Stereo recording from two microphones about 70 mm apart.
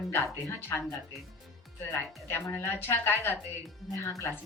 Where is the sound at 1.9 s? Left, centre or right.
Left.